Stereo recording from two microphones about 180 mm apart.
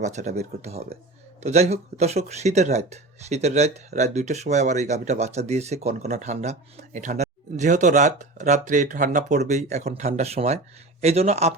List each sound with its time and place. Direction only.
0.0 s speech: 40° right (ahead or behind)